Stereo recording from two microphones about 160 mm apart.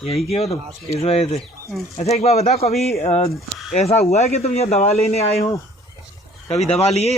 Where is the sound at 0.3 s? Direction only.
40° left (ahead or behind).